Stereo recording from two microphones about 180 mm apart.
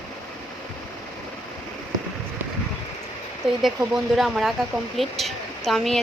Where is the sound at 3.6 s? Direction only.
Centre (ahead or behind).